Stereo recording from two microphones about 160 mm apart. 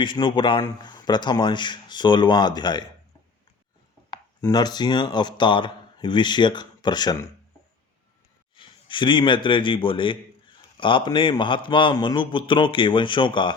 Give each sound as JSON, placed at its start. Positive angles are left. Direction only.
{"t": 0.0, "sound": "speech", "side_deg": 30}
{"t": 4.1, "sound": "speech", "side_deg": 25}
{"t": 8.5, "sound": "a man's voice", "side_deg": 30}